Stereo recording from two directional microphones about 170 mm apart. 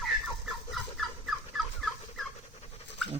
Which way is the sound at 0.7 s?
Centre (ahead or behind).